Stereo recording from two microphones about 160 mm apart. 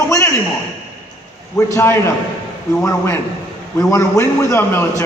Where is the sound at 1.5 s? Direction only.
15° left (ahead or behind).